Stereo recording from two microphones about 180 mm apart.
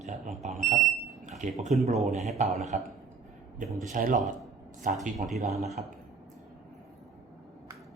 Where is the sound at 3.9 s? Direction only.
45° right (ahead or behind).